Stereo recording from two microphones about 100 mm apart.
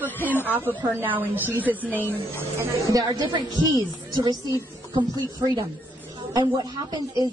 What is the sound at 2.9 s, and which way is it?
A woman's voice, 35° right (ahead or behind).